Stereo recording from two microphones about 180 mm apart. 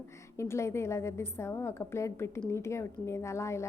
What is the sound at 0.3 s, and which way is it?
A woman's voice, 15° left (ahead or behind).